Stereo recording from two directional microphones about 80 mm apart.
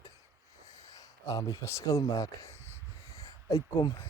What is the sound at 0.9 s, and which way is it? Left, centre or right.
Speech, left.